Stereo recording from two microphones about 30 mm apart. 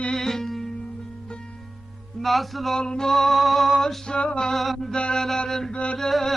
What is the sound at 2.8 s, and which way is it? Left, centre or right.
Music, left.